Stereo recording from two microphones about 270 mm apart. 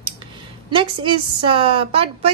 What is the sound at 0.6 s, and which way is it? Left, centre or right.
A woman's voice, centre.